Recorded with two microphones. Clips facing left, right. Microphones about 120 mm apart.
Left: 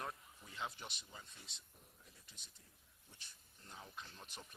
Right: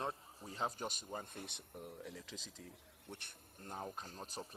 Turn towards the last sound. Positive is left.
turn(degrees=-40)  # may be behind; listen again after turning